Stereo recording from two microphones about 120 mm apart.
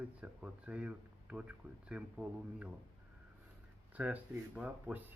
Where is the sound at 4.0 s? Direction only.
15° right (ahead or behind).